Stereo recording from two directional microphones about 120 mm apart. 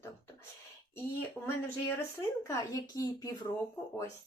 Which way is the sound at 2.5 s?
30° left (ahead or behind).